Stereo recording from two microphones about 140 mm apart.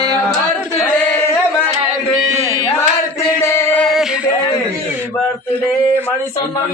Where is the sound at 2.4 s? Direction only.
20° left (ahead or behind).